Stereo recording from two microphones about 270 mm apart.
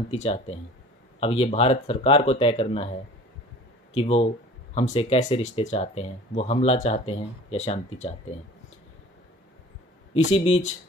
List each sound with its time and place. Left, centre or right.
0.1 s speech: left
10.1 s speech: left